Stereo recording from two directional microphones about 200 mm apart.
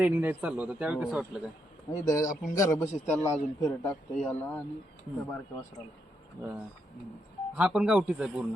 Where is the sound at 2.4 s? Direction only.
15° left (ahead or behind).